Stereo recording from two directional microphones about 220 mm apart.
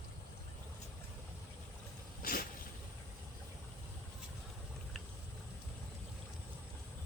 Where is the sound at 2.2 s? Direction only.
40° left (ahead or behind).